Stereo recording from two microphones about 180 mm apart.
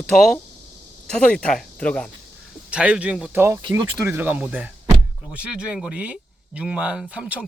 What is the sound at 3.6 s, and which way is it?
Speech, 25° right (ahead or behind).